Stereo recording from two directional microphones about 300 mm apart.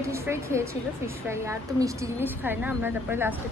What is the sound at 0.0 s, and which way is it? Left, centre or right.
A woman's voice, centre.